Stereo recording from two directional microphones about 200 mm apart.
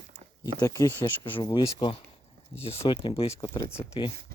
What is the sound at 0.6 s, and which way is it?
Speech, 15° left (ahead or behind).